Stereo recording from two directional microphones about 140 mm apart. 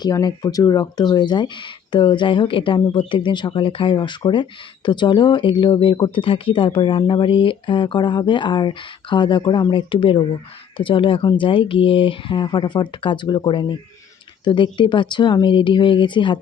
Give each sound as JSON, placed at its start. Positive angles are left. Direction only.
{"t": 0.0, "sound": "speech", "side_deg": 30}